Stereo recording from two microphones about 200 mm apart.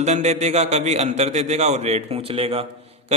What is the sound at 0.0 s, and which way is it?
A man's voice, 35° right (ahead or behind).